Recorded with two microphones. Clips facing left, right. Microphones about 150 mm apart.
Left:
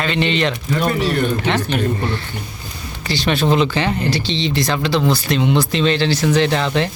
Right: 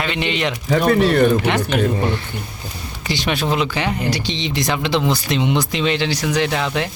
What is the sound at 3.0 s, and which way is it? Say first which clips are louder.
Speech: left 3 dB; 15° right (ahead or behind).